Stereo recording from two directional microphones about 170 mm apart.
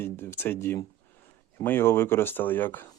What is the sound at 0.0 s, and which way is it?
A man's voice, 15° left (ahead or behind).